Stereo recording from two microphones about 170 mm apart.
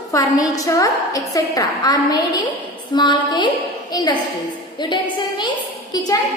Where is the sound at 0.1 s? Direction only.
20° left (ahead or behind).